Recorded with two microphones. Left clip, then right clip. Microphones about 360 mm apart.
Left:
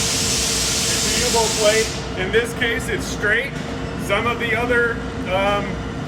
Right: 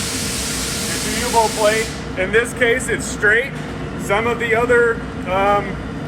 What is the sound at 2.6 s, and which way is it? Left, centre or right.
Speech, centre.